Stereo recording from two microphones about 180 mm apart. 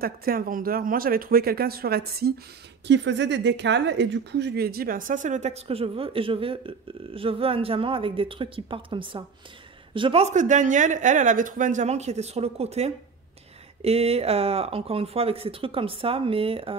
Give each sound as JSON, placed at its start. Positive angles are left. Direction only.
{"t": 0.0, "sound": "speech", "side_deg": -55}
{"t": 2.9, "sound": "a woman's voice", "side_deg": -80}